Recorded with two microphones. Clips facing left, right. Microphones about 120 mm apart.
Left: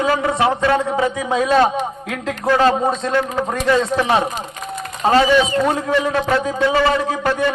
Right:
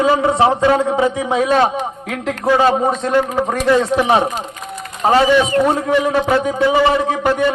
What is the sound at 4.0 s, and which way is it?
A man's voice, 15° right (ahead or behind).